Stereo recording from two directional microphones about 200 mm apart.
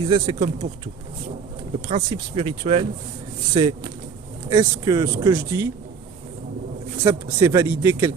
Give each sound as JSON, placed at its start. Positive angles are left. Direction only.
{"t": 0.0, "sound": "speech", "side_deg": -25}
{"t": 2.0, "sound": "speech", "side_deg": -25}
{"t": 7.0, "sound": "speech", "side_deg": -10}